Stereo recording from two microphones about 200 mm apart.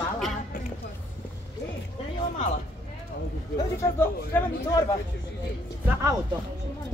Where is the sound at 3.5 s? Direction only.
15° left (ahead or behind).